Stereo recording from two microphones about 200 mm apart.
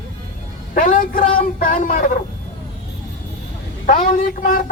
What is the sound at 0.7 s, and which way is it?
A man's voice, 40° left (ahead or behind).